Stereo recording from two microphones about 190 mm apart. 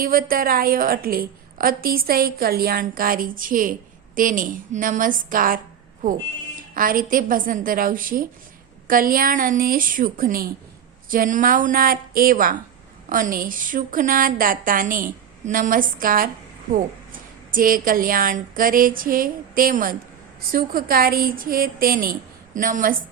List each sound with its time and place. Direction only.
0.0 s a woman's voice: 50° right (ahead or behind)
6.7 s a woman's voice: 45° right (ahead or behind)